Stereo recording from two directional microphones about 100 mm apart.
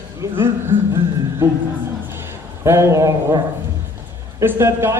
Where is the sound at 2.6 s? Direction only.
25° right (ahead or behind).